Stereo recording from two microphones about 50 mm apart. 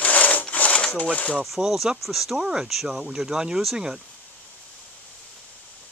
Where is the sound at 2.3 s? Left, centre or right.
Centre.